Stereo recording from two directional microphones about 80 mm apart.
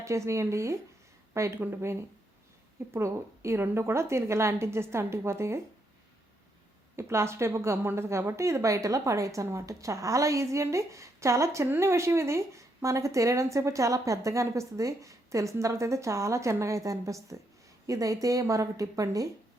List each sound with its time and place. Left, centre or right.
0.0 s a woman's voice: right
6.9 s a woman's voice: right